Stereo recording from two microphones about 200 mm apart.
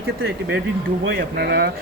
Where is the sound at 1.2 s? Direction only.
55° right (ahead or behind).